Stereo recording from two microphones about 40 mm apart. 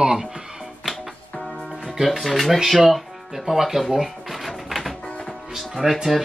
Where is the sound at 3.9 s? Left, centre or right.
Centre.